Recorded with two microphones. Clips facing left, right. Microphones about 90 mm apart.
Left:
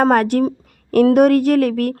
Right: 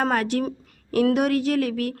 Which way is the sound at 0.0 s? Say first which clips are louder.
Left 8 dB; 50° left (ahead or behind).